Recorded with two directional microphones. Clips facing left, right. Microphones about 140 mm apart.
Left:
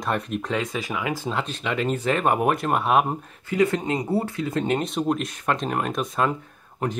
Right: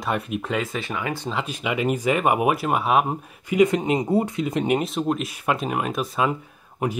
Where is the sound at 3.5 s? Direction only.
15° right (ahead or behind).